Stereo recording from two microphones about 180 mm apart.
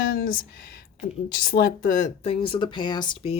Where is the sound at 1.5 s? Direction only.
50° left (ahead or behind); by 3.3 s 25° left (ahead or behind).